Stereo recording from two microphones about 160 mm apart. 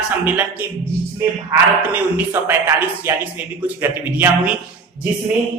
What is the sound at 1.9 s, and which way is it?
Speech, 10° right (ahead or behind).